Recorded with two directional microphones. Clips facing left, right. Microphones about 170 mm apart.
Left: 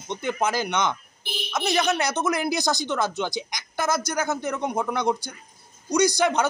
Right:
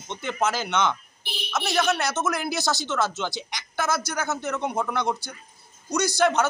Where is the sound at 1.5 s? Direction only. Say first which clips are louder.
Left 2 dB; centre (ahead or behind).